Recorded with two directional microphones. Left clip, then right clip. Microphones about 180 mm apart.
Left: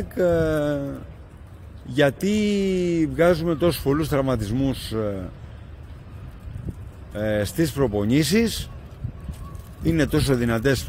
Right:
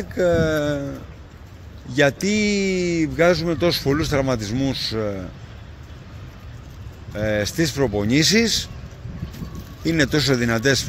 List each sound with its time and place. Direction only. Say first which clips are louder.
0.1 s a man's voice: right 2 dB; 20° left (ahead or behind)
7.2 s a man's voice: right 2 dB; 15° left (ahead or behind)
9.8 s a man's voice: right 3 dB; 20° left (ahead or behind)